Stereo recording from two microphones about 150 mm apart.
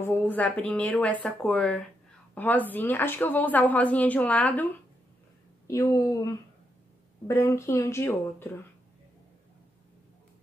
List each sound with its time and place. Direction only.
0.0 s a woman's voice: 15° left (ahead or behind)
5.7 s speech: 20° left (ahead or behind)